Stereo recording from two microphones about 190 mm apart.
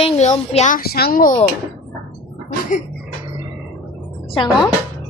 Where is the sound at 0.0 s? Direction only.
35° left (ahead or behind).